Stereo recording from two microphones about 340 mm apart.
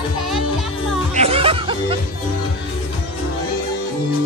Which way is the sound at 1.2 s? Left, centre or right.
Centre.